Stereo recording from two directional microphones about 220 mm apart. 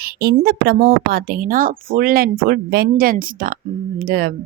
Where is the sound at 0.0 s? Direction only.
45° right (ahead or behind).